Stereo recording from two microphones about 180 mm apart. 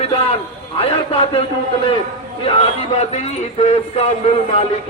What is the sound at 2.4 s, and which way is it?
A man's voice, 35° left (ahead or behind).